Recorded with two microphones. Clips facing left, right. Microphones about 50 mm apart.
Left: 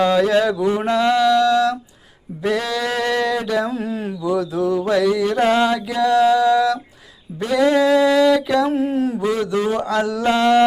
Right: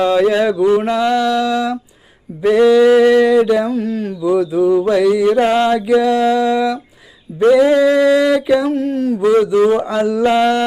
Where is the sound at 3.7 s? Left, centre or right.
Centre.